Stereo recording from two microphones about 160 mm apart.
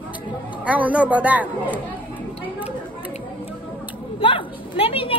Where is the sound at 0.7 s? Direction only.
10° right (ahead or behind).